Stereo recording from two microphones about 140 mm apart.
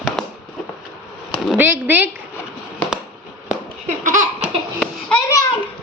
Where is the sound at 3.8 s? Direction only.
60° right (ahead or behind).